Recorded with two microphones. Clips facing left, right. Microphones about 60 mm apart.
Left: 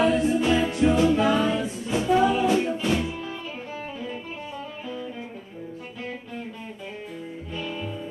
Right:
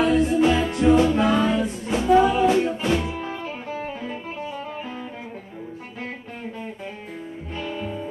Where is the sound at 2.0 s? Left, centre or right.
Right.